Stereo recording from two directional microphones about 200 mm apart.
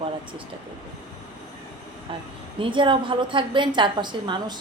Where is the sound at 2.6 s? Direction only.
25° right (ahead or behind).